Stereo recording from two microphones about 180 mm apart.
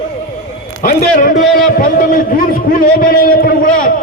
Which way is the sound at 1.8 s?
50° left (ahead or behind).